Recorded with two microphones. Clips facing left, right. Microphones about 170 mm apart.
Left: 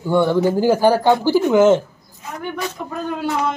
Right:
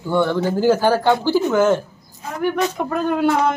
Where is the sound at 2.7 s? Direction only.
60° right (ahead or behind).